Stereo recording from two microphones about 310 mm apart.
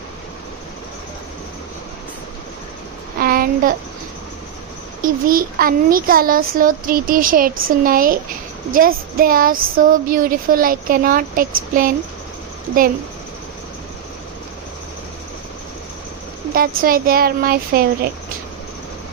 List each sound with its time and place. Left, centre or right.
3.2 s child singing: right
5.0 s speech: right
16.6 s speech: right